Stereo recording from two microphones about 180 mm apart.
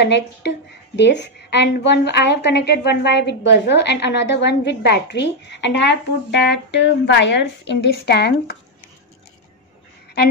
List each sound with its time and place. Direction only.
0.0 s a woman's voice: 70° left (ahead or behind)